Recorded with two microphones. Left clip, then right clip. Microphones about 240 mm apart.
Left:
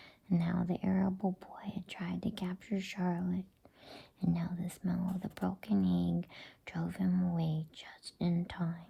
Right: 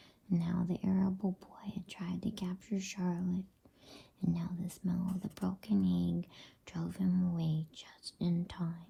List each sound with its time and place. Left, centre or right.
0.3 s speech: left